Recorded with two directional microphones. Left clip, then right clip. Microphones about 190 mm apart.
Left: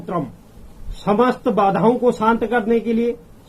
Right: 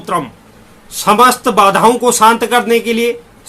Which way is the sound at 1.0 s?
15° right (ahead or behind).